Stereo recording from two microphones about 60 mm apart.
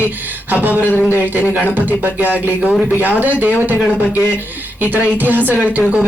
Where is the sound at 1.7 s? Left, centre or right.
Right.